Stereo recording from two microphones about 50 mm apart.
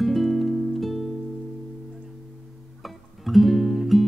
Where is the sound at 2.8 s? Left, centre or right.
Centre.